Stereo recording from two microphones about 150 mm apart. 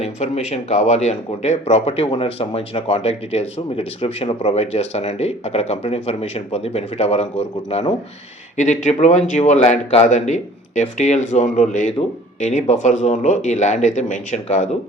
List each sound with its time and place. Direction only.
0.0 s speech: 50° left (ahead or behind)